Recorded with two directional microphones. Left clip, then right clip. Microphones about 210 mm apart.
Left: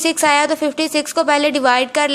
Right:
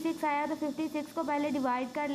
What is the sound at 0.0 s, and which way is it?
A woman's voice, 30° left (ahead or behind).